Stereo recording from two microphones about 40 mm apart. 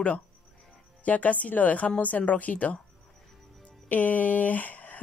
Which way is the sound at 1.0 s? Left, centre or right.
Left.